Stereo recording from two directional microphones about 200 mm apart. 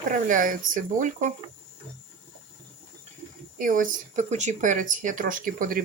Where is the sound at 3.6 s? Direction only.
40° right (ahead or behind).